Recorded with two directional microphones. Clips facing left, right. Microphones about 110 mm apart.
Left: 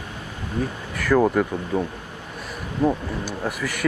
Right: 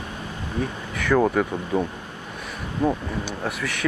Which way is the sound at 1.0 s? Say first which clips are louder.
Left 1 dB; 5° left (ahead or behind).